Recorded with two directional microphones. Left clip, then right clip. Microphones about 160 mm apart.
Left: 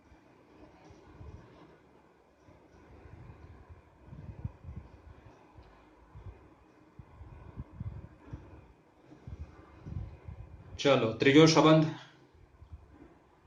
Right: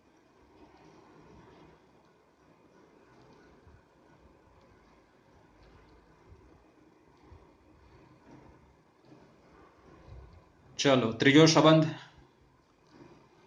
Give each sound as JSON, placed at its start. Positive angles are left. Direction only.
{"t": 10.8, "sound": "speech", "side_deg": -40}